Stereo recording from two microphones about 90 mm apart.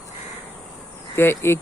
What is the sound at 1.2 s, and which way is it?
Speech, 25° left (ahead or behind).